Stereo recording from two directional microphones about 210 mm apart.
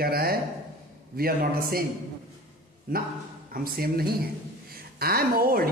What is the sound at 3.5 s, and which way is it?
A man's voice, 45° right (ahead or behind).